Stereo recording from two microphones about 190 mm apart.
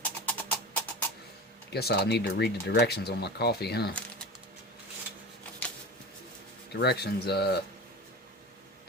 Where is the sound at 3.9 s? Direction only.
5° left (ahead or behind).